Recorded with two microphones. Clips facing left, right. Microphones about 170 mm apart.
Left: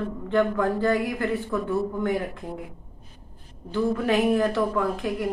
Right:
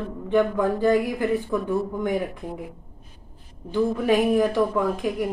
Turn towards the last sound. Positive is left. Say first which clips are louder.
# right 2 dB
turn(degrees=-15)  # may be behind; listen again after turning